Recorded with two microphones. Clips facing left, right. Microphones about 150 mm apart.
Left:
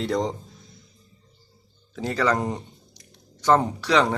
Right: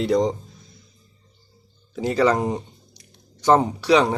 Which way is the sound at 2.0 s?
15° right (ahead or behind).